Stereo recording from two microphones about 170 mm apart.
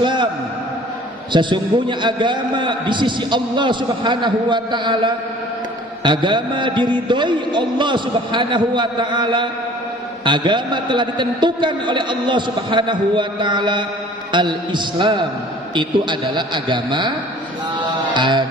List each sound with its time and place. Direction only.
0.0 s a sound: 25° right (ahead or behind)
1.3 s a man's voice: 30° right (ahead or behind)
17.7 s music: 25° right (ahead or behind)